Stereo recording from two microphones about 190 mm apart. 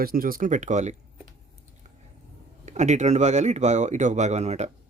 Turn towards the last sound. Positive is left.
turn(degrees=-35)  # may be behind; listen again after turning